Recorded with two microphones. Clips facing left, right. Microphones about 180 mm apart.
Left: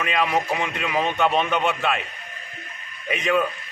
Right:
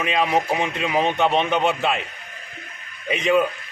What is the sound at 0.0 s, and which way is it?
A man's voice, 25° right (ahead or behind).